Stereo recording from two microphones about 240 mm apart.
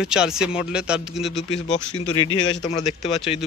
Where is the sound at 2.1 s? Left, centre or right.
Centre.